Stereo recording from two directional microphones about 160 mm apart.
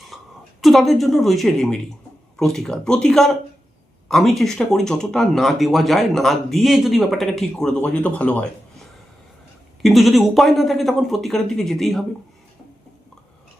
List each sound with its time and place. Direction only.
0.1 s a sound: centre (ahead or behind)
0.6 s speech: centre (ahead or behind)
9.8 s speech: centre (ahead or behind)